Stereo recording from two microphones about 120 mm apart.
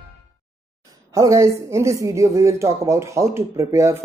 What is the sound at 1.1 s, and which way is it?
Speech, 25° right (ahead or behind).